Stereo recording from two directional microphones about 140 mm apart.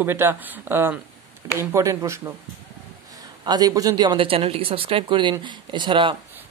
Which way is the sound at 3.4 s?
30° right (ahead or behind).